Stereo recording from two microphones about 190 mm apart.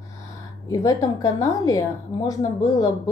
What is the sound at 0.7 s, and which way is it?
A woman's voice, 20° left (ahead or behind).